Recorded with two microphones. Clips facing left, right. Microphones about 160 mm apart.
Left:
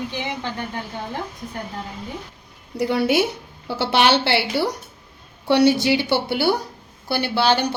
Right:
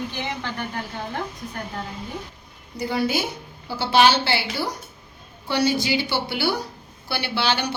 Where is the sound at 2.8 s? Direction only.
70° left (ahead or behind).